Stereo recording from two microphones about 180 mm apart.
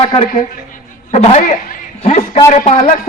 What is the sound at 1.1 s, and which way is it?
A man's voice, 40° left (ahead or behind).